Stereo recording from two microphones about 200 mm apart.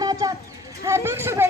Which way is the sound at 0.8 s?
15° right (ahead or behind).